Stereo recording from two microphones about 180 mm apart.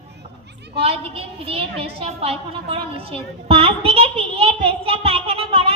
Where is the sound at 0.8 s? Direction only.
30° right (ahead or behind).